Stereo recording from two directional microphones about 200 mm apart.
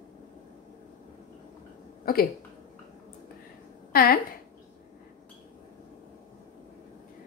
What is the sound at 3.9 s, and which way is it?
Speech, 50° left (ahead or behind).